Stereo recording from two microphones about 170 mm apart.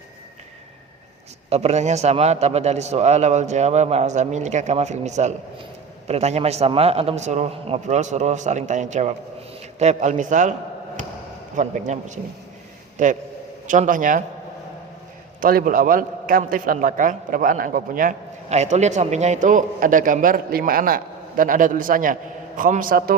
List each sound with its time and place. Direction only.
1.5 s a man's voice: 40° right (ahead or behind)
11.5 s a man's voice: 45° right (ahead or behind)
15.4 s a man's voice: 55° right (ahead or behind)